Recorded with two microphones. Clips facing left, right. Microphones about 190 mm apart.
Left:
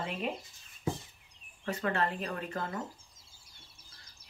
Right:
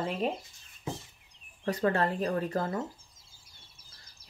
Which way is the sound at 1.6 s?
35° right (ahead or behind).